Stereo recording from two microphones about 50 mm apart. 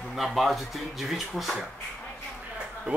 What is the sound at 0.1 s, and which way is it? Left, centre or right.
Speech, centre.